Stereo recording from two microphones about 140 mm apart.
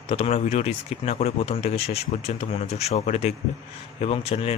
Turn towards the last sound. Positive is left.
turn(degrees=45)  # may be behind; listen again after turning